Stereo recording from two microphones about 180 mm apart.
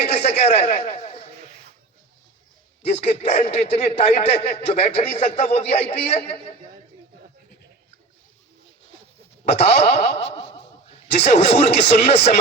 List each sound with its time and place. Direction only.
0.0 s a sound: 40° left (ahead or behind)
2.9 s a man's voice: 35° left (ahead or behind)
9.5 s a man's voice: 40° left (ahead or behind)